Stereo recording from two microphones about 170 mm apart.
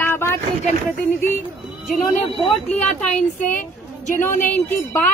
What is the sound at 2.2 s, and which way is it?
Speech, 35° left (ahead or behind).